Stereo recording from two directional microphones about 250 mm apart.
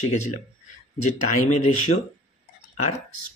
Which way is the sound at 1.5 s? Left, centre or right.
Left.